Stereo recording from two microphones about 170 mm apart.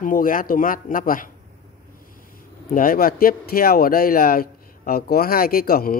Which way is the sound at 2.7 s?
55° left (ahead or behind).